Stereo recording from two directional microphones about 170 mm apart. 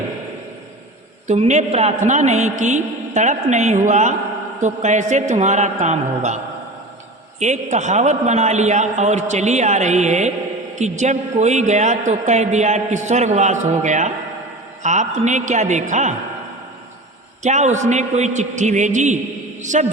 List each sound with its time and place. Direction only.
1.3 s a woman's voice: 45° right (ahead or behind)
17.4 s a woman's voice: 45° right (ahead or behind)